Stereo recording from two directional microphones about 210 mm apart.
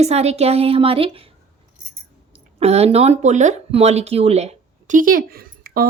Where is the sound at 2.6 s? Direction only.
30° right (ahead or behind).